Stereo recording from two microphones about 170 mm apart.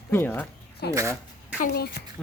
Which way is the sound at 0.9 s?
20° right (ahead or behind).